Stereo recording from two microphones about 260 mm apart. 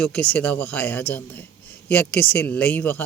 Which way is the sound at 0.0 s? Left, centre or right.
Centre.